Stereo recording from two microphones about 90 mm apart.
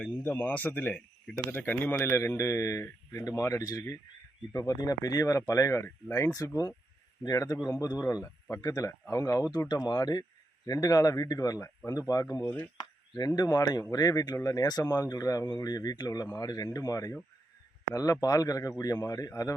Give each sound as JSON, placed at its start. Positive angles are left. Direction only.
{"t": 0.1, "sound": "speech", "side_deg": 20}
{"t": 9.6, "sound": "speech", "side_deg": 50}